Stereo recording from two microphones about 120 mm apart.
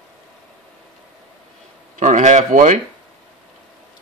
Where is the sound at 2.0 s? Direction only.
85° right.